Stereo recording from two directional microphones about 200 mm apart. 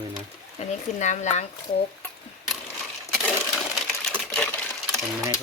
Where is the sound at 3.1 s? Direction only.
Centre (ahead or behind).